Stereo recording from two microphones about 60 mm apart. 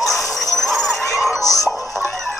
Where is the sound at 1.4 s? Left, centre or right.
Left.